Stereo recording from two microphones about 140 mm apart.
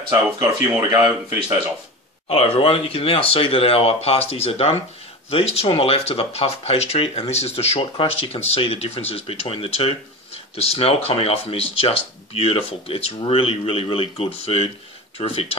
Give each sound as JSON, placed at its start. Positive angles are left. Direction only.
{"t": 0.1, "sound": "speech", "side_deg": -15}
{"t": 2.2, "sound": "speech", "side_deg": 45}